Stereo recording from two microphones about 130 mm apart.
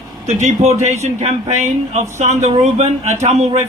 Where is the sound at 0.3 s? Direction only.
60° right (ahead or behind).